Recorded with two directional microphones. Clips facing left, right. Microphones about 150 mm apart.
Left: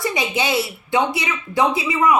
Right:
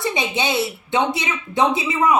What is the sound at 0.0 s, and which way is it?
Speech, 25° right (ahead or behind).